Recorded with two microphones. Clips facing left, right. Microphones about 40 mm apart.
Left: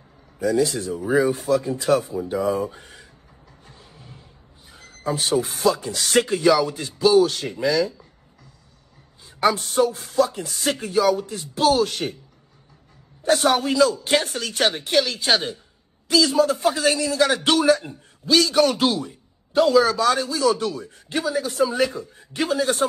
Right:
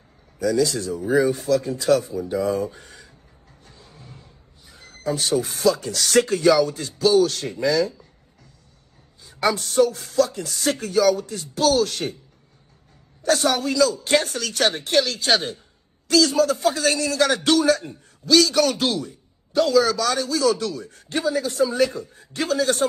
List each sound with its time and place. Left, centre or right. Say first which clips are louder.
0.4 s a man's voice: even; left
0.7 s speech: right 1 dB; left
0.9 s speech: even; left
1.5 s speech: right 1 dB; left
3.6 s music: even; left
3.9 s a sound: even; centre
5.2 s speech: even; left
9.2 s speech: left 2 dB; left
13.2 s a man's voice: left 1 dB; left
13.5 s speech: left 4 dB; left; by 15.6 s centre
16.3 s a man's voice: left 1 dB; left